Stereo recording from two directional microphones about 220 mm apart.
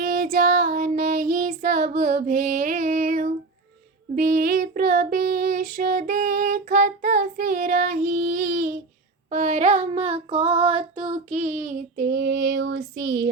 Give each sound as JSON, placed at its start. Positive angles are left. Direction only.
{"t": 0.0, "sound": "child singing", "side_deg": -40}